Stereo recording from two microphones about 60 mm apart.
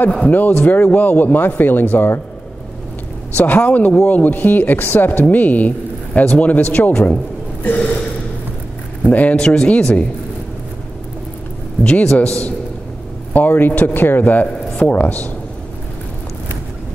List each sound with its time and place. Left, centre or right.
0.3 s speech: left
3.3 s speech: left
6.9 s speech: centre
9.0 s speech: left
11.8 s a man's voice: left
13.3 s speech: left